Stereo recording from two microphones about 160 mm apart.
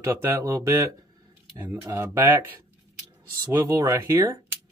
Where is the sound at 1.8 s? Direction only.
15° right (ahead or behind).